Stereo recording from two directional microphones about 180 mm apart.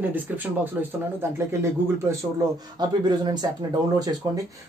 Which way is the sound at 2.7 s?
25° right (ahead or behind).